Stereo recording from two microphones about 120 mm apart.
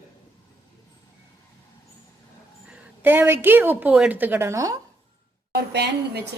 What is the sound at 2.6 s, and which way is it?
A woman's voice, 15° right (ahead or behind).